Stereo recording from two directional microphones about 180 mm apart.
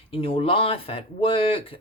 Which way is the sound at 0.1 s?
30° left (ahead or behind).